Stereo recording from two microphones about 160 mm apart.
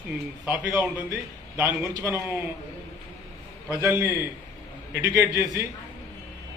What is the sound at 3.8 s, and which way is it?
A man's voice, 15° right (ahead or behind).